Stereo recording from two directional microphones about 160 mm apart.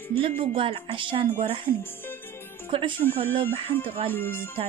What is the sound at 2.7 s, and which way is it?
Speech, 35° right (ahead or behind).